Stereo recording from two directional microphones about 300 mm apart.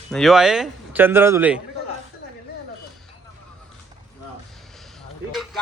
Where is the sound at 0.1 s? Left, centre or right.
Centre.